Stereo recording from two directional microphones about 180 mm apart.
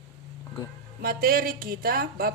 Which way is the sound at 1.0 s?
55° right (ahead or behind).